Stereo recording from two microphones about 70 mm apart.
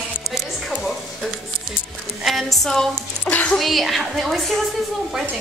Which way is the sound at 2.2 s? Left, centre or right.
Centre.